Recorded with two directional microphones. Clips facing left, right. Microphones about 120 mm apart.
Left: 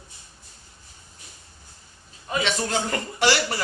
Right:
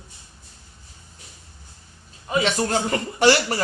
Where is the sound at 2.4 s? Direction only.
40° right (ahead or behind).